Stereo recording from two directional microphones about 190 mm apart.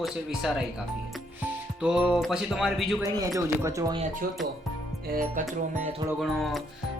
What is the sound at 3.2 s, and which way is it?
Speech, 15° right (ahead or behind).